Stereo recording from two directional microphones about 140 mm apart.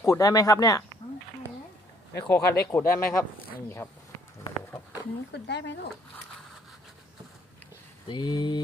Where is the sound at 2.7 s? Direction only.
15° left (ahead or behind).